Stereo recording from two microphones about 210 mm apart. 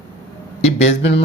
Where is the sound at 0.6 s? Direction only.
30° left (ahead or behind).